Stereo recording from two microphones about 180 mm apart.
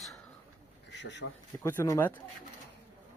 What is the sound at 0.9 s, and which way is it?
Speech, 75° left (ahead or behind).